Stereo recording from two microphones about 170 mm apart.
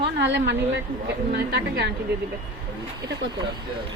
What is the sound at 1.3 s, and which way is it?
Speech, 70° right (ahead or behind).